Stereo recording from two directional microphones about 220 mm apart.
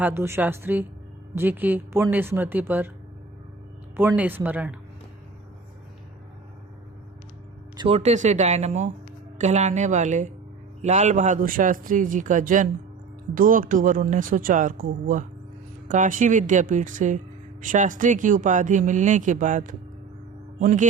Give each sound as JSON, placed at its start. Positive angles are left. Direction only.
{"t": 0.0, "sound": "a woman's voice", "side_deg": -10}
{"t": 3.9, "sound": "a woman's voice", "side_deg": -10}
{"t": 7.8, "sound": "speech", "side_deg": -25}
{"t": 20.6, "sound": "music", "side_deg": -35}